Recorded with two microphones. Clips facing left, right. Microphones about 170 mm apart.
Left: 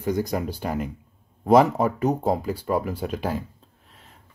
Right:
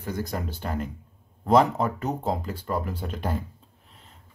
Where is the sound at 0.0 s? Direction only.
15° left (ahead or behind).